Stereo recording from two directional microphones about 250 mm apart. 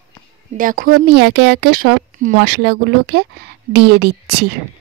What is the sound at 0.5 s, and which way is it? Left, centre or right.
Speech, right.